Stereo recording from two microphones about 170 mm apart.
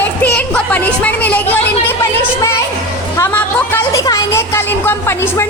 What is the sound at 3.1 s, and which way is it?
Speech, 15° left (ahead or behind).